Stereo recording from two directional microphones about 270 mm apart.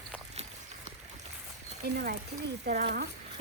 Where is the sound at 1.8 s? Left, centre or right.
Right.